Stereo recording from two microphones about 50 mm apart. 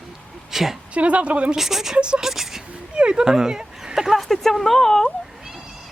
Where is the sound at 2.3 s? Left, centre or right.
Centre.